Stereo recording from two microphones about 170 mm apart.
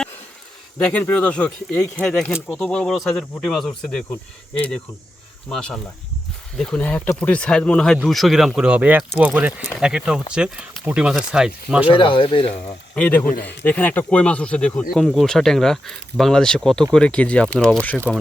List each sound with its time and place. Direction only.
0.8 s speech: 10° left (ahead or behind)
2.3 s speech: 5° right (ahead or behind)
5.5 s speech: 5° left (ahead or behind)
11.9 s speech: 30° left (ahead or behind)
13.0 s speech: 10° left (ahead or behind)